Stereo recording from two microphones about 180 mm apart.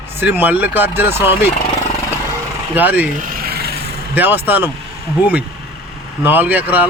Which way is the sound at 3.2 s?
60° right (ahead or behind).